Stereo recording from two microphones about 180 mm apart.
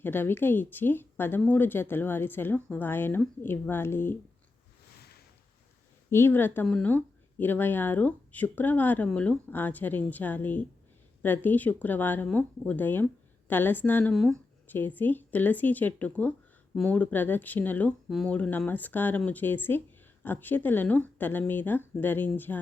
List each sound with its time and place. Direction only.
0.0 s speech: 10° left (ahead or behind)
6.1 s speech: 15° left (ahead or behind)